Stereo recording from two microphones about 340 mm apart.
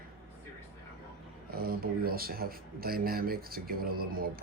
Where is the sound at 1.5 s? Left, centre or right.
Right.